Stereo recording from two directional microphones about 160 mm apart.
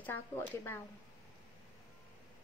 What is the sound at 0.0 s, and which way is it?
Speech, 10° left (ahead or behind).